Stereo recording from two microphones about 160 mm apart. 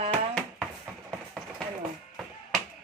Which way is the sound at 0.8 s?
10° right (ahead or behind).